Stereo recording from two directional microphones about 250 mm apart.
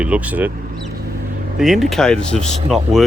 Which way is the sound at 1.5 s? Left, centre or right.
Centre.